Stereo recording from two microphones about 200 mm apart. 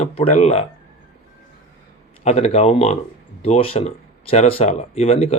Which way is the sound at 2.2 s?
35° left (ahead or behind).